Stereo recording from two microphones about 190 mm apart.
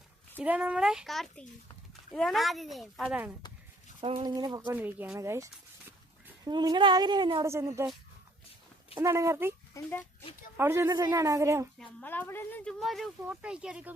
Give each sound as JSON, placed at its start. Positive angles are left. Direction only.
{"t": 0.3, "sound": "a woman's voice", "side_deg": -10}
{"t": 4.0, "sound": "speech", "side_deg": -30}
{"t": 4.3, "sound": "a woman's voice", "side_deg": -20}
{"t": 9.0, "sound": "speech", "side_deg": -15}
{"t": 10.6, "sound": "speech", "side_deg": -15}
{"t": 11.8, "sound": "a woman's voice", "side_deg": 10}